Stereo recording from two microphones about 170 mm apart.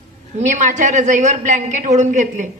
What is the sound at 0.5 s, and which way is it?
A woman's voice, 45° right (ahead or behind).